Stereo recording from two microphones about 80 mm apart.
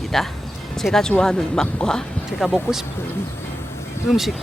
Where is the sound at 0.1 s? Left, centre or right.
Centre.